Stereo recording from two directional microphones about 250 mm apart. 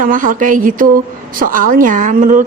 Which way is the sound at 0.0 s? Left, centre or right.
Right.